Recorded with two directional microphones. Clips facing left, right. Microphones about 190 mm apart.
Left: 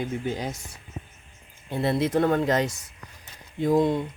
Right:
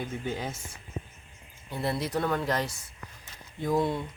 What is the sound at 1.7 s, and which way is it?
Speech, 25° left (ahead or behind).